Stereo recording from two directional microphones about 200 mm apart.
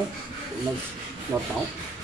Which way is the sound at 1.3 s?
5° right (ahead or behind).